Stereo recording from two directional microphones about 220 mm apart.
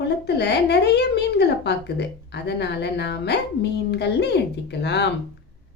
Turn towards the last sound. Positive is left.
turn(degrees=50)  # may be behind; listen again after turning